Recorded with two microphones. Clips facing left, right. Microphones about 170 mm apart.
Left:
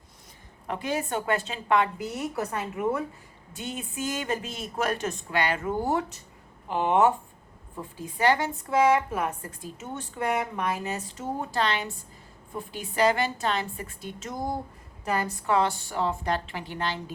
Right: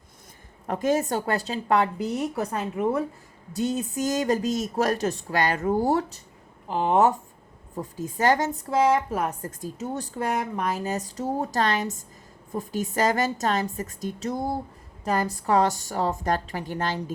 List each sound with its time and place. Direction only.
0.7 s a woman's voice: 45° right (ahead or behind)